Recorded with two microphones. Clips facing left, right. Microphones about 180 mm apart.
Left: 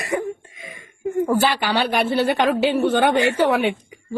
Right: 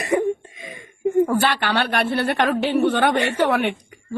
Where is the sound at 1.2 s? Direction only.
5° left (ahead or behind).